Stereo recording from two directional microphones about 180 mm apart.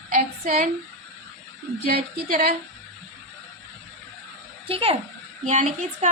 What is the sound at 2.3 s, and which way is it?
Speech, 55° right (ahead or behind).